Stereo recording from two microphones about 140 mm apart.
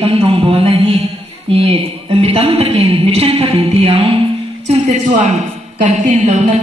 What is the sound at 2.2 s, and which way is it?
Speech, 45° right (ahead or behind).